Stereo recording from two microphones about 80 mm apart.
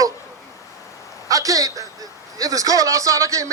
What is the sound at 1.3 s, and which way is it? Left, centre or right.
A man's voice, right.